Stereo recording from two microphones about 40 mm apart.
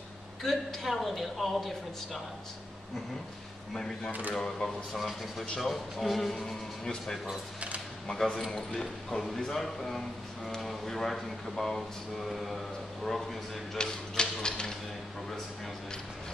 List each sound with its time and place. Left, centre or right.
0.4 s speech: centre
3.7 s a man's voice: centre
4.9 s speech: centre
6.4 s a man's voice: centre
8.5 s a man's voice: centre
13.7 s speech: centre